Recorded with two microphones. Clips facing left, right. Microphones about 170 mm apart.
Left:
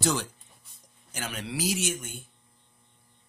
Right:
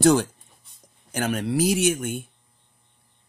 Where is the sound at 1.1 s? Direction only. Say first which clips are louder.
Right 11 dB; 50° right (ahead or behind).